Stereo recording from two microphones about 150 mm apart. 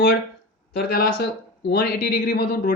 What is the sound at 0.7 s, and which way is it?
Speech, 90° left.